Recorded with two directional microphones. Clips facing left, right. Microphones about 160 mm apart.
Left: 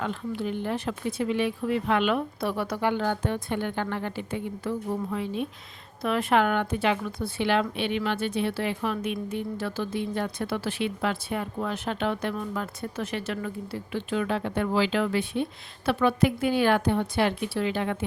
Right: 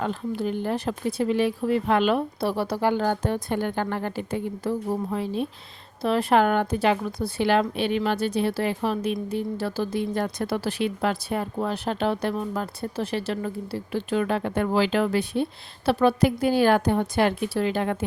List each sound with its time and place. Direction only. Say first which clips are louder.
0.0 s speech: right 3 dB; 40° right (ahead or behind)